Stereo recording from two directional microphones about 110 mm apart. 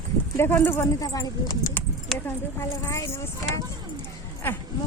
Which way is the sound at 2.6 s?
30° left (ahead or behind).